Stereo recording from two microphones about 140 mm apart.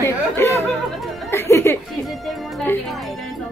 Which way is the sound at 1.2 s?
20° left (ahead or behind).